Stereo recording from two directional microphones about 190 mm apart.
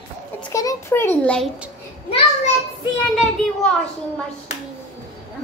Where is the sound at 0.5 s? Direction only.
15° left (ahead or behind).